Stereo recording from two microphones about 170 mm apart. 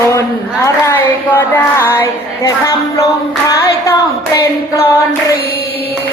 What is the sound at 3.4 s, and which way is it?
Singing, 20° left (ahead or behind).